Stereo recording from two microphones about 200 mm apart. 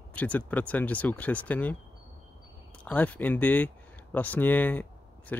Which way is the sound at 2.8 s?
5° left (ahead or behind).